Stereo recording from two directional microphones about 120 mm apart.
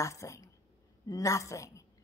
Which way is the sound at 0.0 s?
25° left (ahead or behind).